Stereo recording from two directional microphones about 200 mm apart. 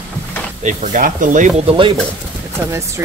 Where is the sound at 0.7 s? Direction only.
40° right (ahead or behind).